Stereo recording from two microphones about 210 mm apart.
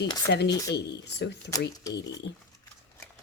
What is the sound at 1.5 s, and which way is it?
Speech, 15° left (ahead or behind).